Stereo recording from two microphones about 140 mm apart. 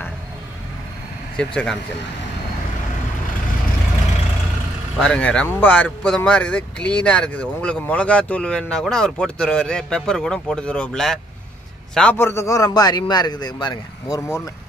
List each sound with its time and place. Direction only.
1.3 s speech: 5° left (ahead or behind)
4.9 s a man's voice: 5° left (ahead or behind); by 14.5 s 20° left (ahead or behind)